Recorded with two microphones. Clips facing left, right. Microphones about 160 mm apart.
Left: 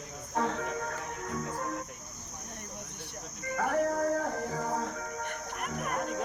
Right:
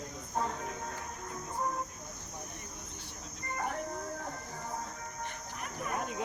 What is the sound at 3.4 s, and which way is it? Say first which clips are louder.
Music: left 8 dB; 90° left.